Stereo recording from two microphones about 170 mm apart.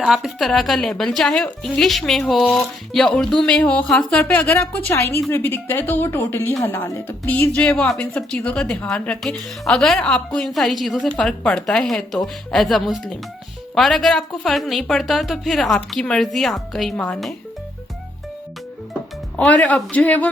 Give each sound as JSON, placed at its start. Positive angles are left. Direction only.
{"t": 0.0, "sound": "a woman's voice", "side_deg": 0}
{"t": 19.4, "sound": "a woman's voice", "side_deg": 10}